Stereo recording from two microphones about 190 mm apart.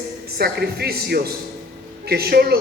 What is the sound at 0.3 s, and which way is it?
Speech, 55° right (ahead or behind).